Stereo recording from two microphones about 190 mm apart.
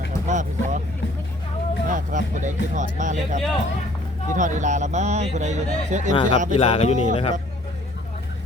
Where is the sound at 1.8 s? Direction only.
45° right (ahead or behind).